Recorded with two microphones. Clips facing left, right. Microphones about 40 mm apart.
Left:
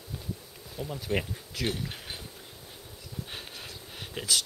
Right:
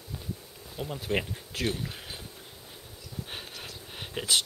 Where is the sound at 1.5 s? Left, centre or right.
Right.